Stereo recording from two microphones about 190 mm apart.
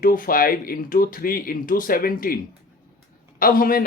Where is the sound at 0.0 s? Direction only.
50° left (ahead or behind).